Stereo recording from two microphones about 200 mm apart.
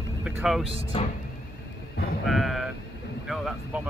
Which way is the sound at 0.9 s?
30° left (ahead or behind).